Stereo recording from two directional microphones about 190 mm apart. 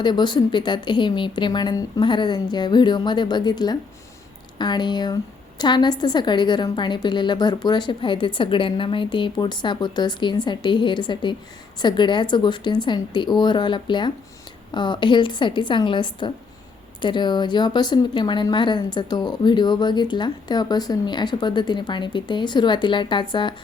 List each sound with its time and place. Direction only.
0.0 s speech: 25° left (ahead or behind)